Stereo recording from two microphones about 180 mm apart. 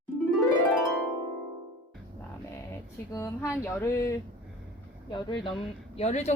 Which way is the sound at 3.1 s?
15° left (ahead or behind).